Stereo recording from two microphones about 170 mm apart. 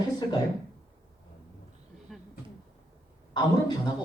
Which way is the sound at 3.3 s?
25° left (ahead or behind).